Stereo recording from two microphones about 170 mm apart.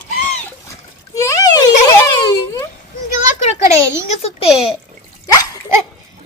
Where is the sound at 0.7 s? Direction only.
20° left (ahead or behind).